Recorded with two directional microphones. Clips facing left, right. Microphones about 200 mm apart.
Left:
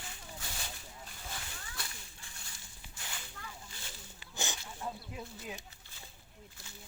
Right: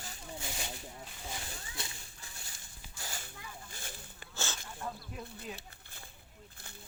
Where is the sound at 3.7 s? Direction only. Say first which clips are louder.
Right 3 dB; 50° right (ahead or behind).